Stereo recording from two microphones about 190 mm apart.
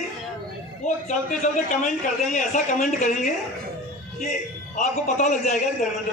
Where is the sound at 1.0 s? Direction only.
40° left (ahead or behind).